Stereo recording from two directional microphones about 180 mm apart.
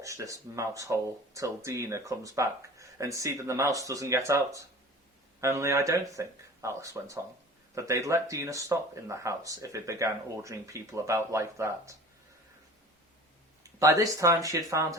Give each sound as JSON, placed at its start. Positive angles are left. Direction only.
{"t": 0.0, "sound": "speech", "side_deg": -15}
{"t": 13.7, "sound": "speech", "side_deg": -15}